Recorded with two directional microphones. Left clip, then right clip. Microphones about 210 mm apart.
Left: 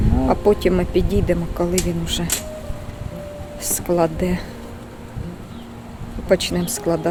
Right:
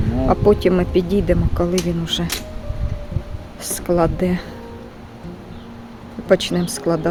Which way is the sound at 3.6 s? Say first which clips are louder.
Right 1 dB; 20° right (ahead or behind).